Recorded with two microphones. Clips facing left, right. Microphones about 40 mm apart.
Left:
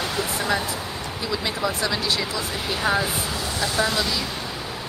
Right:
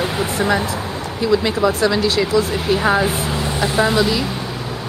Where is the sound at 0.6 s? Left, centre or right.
Right.